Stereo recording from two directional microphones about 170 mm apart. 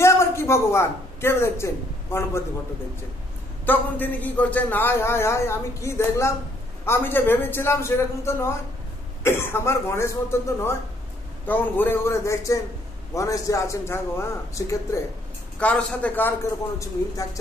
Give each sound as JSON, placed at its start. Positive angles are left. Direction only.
{"t": 0.0, "sound": "speech", "side_deg": 15}
{"t": 3.6, "sound": "a man's voice", "side_deg": 10}